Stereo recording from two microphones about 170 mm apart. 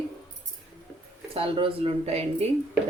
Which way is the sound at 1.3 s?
30° right (ahead or behind).